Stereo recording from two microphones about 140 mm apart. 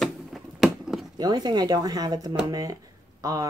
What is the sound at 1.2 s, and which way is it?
Speech, 30° right (ahead or behind).